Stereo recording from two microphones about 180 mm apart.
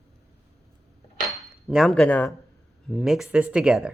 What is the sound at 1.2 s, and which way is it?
Dishes, centre (ahead or behind).